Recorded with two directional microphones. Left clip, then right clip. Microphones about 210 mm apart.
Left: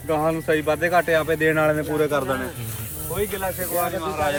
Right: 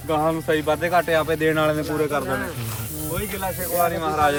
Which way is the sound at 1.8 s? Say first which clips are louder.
Left 1 dB; 15° left (ahead or behind).